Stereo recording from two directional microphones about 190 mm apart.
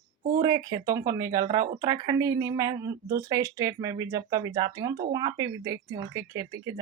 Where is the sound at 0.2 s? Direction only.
50° right (ahead or behind).